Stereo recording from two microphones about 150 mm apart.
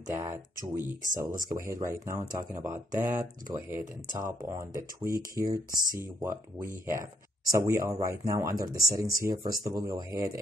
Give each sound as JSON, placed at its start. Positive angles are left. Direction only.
{"t": 0.0, "sound": "speech", "side_deg": -20}
{"t": 6.9, "sound": "speech", "side_deg": -20}